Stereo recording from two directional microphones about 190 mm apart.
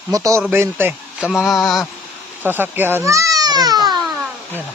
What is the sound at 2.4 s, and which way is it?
Speech, 10° right (ahead or behind).